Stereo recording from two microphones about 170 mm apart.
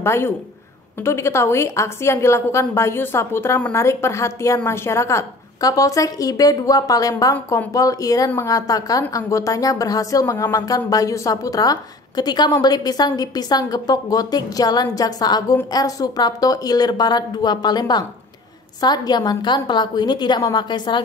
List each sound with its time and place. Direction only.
0.0 s a man's voice: 15° left (ahead or behind)